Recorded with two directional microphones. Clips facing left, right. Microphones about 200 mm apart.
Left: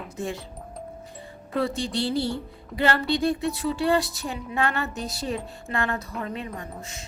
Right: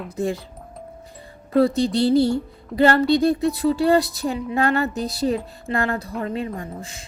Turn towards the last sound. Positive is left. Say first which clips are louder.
# right 4 dB
turn(degrees=-30)  # may be behind; listen again after turning